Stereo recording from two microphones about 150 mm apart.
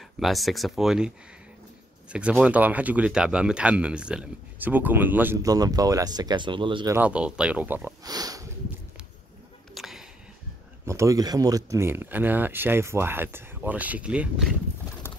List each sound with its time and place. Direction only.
0.2 s speech: centre (ahead or behind)
2.4 s speech: 10° right (ahead or behind); by 6.9 s 35° right (ahead or behind)
6.9 s speech: 10° right (ahead or behind)
8.0 s speech: 25° right (ahead or behind)
9.8 s a sound: centre (ahead or behind)
10.9 s speech: 20° right (ahead or behind)
15.0 s clip-clop: 15° left (ahead or behind)